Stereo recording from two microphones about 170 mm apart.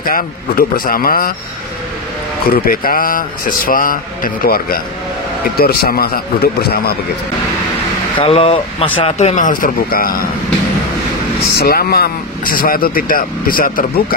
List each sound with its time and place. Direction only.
0.0 s a man's voice: 60° left (ahead or behind)
2.5 s a man's voice: 60° left (ahead or behind)
8.2 s speech: 35° left (ahead or behind); by 10.1 s 60° left (ahead or behind)
11.5 s a man's voice: 65° left (ahead or behind)